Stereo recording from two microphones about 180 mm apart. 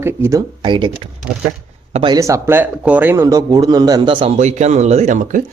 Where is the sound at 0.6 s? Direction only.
25° right (ahead or behind).